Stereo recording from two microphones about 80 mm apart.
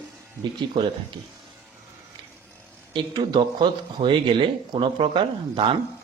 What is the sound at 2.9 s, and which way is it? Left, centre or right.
Speech, right.